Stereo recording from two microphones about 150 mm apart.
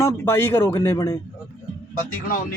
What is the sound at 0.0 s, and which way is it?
Speech, 15° left (ahead or behind).